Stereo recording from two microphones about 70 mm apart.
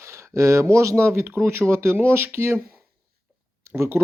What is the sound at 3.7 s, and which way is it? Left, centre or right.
Speech, right.